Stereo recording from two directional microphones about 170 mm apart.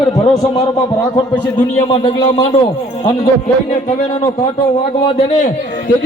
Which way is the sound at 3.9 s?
40° left (ahead or behind).